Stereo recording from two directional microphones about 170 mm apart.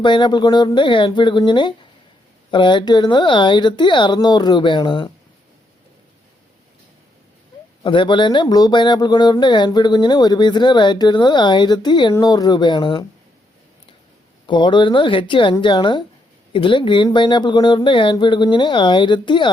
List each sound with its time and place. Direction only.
0.0 s speech: 25° left (ahead or behind)
7.9 s speech: 30° left (ahead or behind)
14.4 s speech: 25° left (ahead or behind)